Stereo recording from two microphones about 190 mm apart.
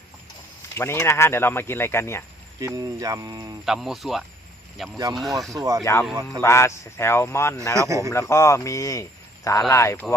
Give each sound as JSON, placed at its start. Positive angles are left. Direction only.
{"t": 0.8, "sound": "speech", "side_deg": 15}
{"t": 2.6, "sound": "speech", "side_deg": -20}
{"t": 3.7, "sound": "speech", "side_deg": 0}
{"t": 5.5, "sound": "speech", "side_deg": -15}
{"t": 5.8, "sound": "speech", "side_deg": 15}
{"t": 7.9, "sound": "speech", "side_deg": -15}
{"t": 8.1, "sound": "speech", "side_deg": 15}